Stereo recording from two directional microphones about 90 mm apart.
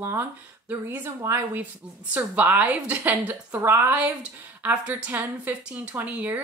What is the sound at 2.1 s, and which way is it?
A woman's voice, 20° right (ahead or behind).